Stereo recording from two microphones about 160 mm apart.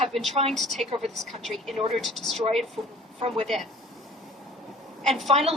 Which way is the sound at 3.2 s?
40° right (ahead or behind).